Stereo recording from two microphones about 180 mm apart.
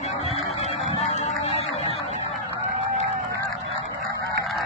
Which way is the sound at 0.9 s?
35° left (ahead or behind).